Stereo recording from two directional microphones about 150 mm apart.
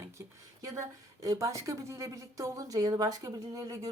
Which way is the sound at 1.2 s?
20° right (ahead or behind).